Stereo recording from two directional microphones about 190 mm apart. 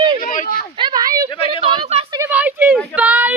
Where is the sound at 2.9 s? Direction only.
10° right (ahead or behind).